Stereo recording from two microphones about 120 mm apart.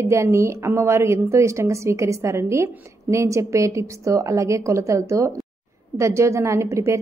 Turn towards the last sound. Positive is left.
turn(degrees=-25)  # may be behind; listen again after turning